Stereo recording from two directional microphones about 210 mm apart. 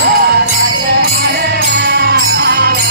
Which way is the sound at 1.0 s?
50° right (ahead or behind).